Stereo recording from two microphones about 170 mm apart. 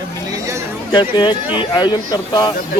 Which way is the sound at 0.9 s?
30° left (ahead or behind).